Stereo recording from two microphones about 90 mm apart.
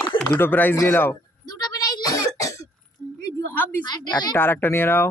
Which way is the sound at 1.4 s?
50° left (ahead or behind).